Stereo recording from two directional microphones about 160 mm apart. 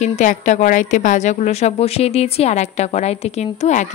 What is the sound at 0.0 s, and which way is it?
A woman's voice, 50° left (ahead or behind).